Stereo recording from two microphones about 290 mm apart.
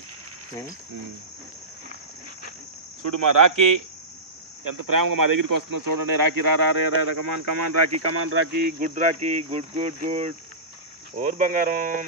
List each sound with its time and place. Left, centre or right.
3.0 s speech: right
8.1 s speech: right